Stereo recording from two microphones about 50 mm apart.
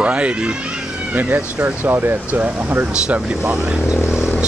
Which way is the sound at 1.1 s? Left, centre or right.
Right.